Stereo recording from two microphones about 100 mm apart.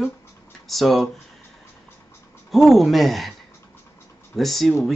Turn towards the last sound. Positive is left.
turn(degrees=0)  # may be behind; listen again after turning